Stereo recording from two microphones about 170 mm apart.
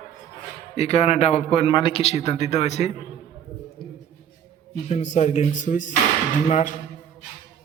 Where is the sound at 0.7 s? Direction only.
40° left (ahead or behind).